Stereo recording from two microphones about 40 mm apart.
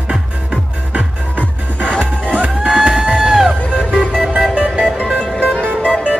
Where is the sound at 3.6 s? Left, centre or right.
Left.